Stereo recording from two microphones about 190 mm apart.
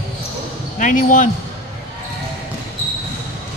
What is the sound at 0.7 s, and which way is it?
Speech, 45° left (ahead or behind).